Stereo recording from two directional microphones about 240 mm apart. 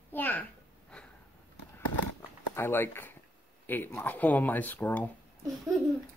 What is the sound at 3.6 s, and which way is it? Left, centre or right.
Speech, centre.